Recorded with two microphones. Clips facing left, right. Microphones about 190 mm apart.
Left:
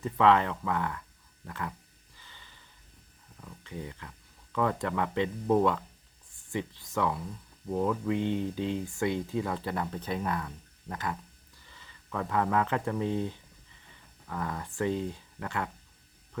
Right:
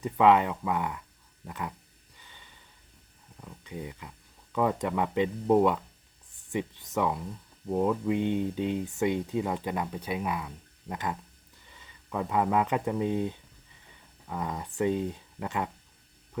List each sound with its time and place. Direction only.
0.0 s speech: 15° right (ahead or behind)
3.4 s speech: 15° right (ahead or behind)